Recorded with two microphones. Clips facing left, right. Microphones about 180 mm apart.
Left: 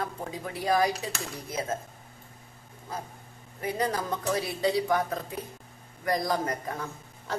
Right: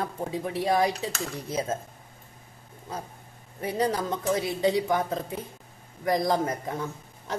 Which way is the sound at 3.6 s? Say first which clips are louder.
Right 3 dB; 25° right (ahead or behind).